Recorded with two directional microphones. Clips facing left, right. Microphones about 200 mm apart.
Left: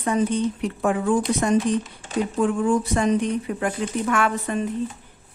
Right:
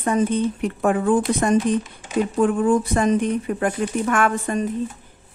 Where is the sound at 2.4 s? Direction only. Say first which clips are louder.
Right 3 dB; 55° right (ahead or behind).